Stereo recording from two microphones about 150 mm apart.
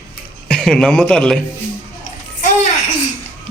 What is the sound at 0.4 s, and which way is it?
Speech, 5° left (ahead or behind).